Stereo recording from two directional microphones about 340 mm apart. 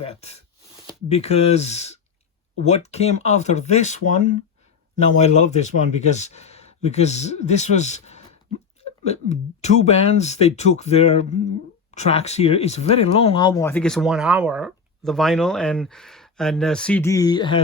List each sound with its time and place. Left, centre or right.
0.0 s speech: centre